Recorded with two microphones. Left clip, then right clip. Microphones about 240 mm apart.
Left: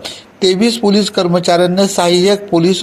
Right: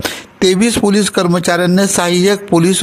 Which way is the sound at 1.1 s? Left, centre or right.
Right.